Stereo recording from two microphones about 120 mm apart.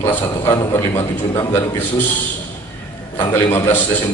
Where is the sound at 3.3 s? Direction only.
15° left (ahead or behind).